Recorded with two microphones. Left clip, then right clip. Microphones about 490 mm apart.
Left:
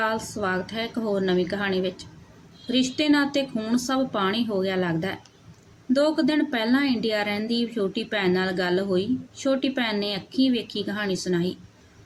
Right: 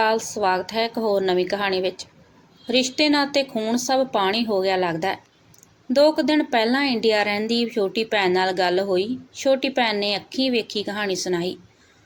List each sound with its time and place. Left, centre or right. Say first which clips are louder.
0.0 s a woman's voice: right 6 dB; left